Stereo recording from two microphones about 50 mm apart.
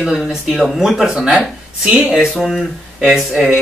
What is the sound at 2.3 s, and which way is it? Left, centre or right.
Speech, centre.